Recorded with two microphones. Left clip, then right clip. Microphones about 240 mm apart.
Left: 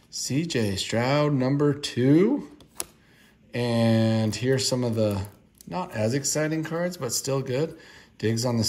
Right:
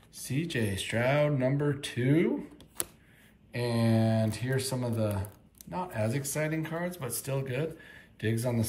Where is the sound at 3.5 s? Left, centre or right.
Centre.